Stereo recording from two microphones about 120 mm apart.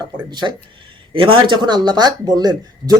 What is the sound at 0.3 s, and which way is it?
A woman's voice, 40° right (ahead or behind).